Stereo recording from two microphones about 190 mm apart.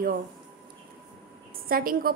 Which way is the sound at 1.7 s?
50° right (ahead or behind).